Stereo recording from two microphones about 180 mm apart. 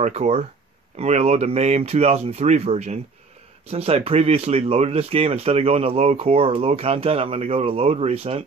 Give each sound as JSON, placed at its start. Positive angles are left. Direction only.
{"t": 0.0, "sound": "speech", "side_deg": -40}